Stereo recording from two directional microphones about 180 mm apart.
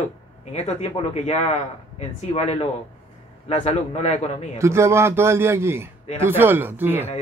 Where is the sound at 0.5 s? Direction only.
35° left (ahead or behind).